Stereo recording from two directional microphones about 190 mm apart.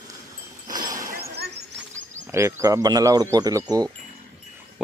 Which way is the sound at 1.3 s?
60° right (ahead or behind).